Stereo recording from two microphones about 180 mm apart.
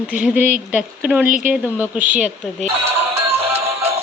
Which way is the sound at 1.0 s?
10° right (ahead or behind).